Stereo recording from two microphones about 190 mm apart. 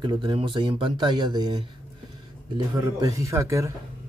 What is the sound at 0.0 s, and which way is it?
A man's voice, 25° right (ahead or behind).